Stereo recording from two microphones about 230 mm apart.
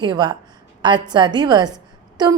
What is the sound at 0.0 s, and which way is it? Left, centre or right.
A woman's voice, centre.